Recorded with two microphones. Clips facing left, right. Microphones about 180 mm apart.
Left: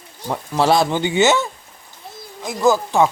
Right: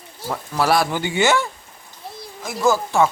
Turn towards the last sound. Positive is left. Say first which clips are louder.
# left 2 dB
turn(degrees=15)  # may be behind; listen again after turning